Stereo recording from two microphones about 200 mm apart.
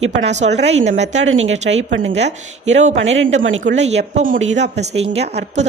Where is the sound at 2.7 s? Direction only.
35° right (ahead or behind).